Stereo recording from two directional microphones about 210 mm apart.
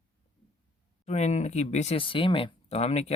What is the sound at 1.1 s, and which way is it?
Speech, 30° left (ahead or behind).